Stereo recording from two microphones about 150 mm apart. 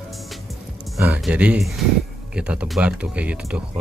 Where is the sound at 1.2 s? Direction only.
10° right (ahead or behind).